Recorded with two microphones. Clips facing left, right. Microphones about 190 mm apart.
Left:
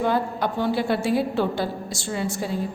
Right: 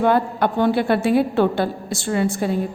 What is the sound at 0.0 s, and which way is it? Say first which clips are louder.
A woman's voice: right 5 dB; 60° right (ahead or behind).